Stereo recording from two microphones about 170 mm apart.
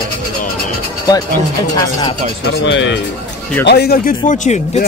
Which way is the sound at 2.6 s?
90° left.